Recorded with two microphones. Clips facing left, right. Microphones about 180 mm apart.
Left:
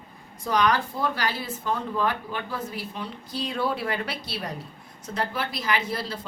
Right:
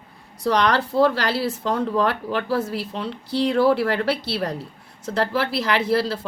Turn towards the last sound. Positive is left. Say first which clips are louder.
# right 8 dB
turn(degrees=-75)  # may be behind; listen again after turning